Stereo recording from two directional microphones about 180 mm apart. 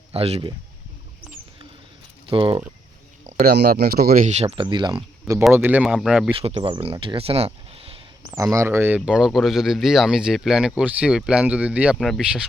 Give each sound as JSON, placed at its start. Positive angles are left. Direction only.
{"t": 0.1, "sound": "speech", "side_deg": -35}
{"t": 2.3, "sound": "speech", "side_deg": -30}
{"t": 3.4, "sound": "speech", "side_deg": -65}
{"t": 5.5, "sound": "speech", "side_deg": -10}
{"t": 6.3, "sound": "speech", "side_deg": -30}
{"t": 8.4, "sound": "speech", "side_deg": -15}